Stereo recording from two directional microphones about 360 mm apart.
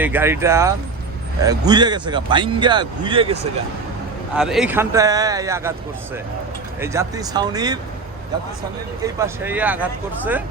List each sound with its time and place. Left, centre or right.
0.0 s speech: centre
4.4 s speech: centre
6.7 s speech: centre
9.0 s speech: centre